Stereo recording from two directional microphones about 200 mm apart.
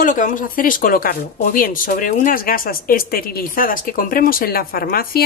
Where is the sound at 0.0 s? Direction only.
40° left (ahead or behind).